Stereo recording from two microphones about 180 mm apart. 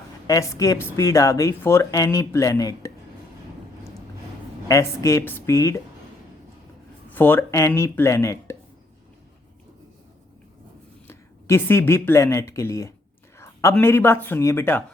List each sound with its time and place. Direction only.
0.3 s speech: 20° left (ahead or behind)
4.7 s speech: 15° left (ahead or behind)
7.1 s speech: 10° left (ahead or behind)
11.1 s speech: 15° left (ahead or behind)
13.4 s a sound: 15° left (ahead or behind)
13.7 s speech: 10° left (ahead or behind)